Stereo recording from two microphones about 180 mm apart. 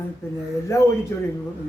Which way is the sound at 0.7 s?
15° left (ahead or behind).